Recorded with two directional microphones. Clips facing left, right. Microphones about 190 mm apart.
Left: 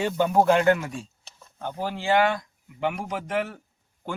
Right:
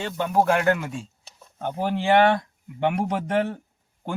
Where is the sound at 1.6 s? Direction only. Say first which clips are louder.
Right 4 dB; 20° right (ahead or behind).